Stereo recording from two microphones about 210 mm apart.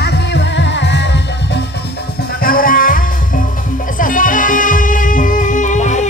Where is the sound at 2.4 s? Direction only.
40° left (ahead or behind).